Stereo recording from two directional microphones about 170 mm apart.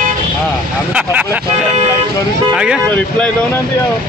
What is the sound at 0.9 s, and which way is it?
Speech, 10° right (ahead or behind).